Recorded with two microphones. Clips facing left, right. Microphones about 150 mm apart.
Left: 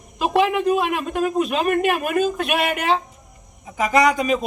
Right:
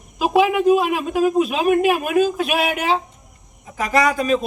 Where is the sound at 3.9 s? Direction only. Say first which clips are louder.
Even; 20° left (ahead or behind).